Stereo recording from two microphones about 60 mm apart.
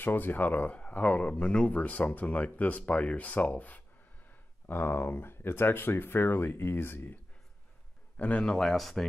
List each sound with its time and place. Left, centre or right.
0.0 s speech: left
8.2 s speech: left
8.5 s speech: centre